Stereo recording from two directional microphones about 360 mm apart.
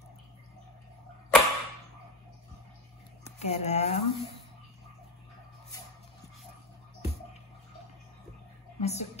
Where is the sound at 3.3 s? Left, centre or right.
Centre.